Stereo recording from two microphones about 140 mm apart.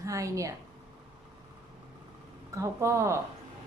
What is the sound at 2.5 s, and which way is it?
Speech, 20° right (ahead or behind).